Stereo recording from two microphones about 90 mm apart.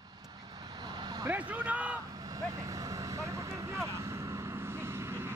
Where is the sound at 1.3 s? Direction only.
15° right (ahead or behind).